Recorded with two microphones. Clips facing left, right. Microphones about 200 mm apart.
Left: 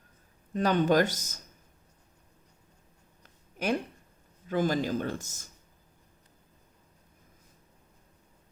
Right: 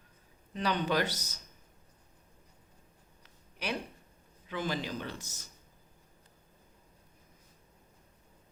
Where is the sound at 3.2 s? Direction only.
45° left (ahead or behind).